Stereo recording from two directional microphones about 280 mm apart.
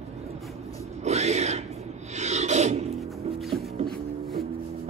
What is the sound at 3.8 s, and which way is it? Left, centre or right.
Beatboxing, centre.